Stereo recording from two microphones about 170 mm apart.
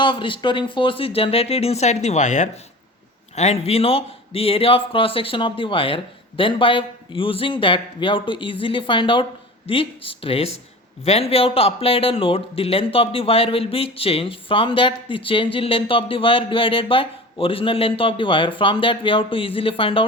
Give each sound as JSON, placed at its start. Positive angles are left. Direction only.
{"t": 0.0, "sound": "a man's voice", "side_deg": 30}